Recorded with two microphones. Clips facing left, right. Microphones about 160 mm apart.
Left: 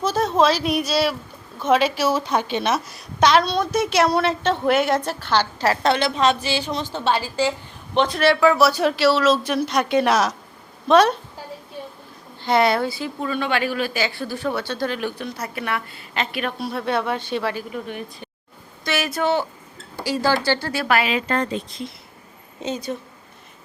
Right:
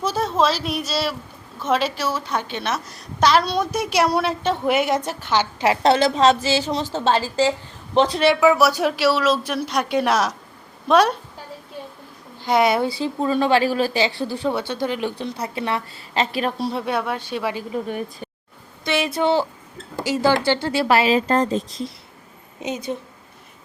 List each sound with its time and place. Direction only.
0.0 s a woman's voice: 5° right (ahead or behind); by 2.8 s 15° left (ahead or behind)
3.2 s a woman's voice: 5° right (ahead or behind)
5.8 s a woman's voice: 30° right (ahead or behind)
8.2 s a woman's voice: 15° right (ahead or behind)
12.4 s a woman's voice: 10° right (ahead or behind)
12.9 s a woman's voice: 30° right (ahead or behind)
16.8 s a woman's voice: 5° right (ahead or behind)
17.5 s a woman's voice: 25° right (ahead or behind)
17.8 s a woman's voice: 40° right (ahead or behind)
18.9 s a woman's voice: 25° right (ahead or behind)
22.6 s a woman's voice: 15° right (ahead or behind)